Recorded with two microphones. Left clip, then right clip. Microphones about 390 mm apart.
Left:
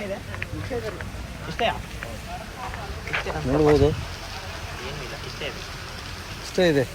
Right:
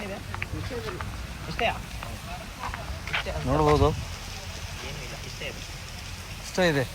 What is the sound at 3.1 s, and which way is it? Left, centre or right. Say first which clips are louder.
Insect: left 2 dB; centre.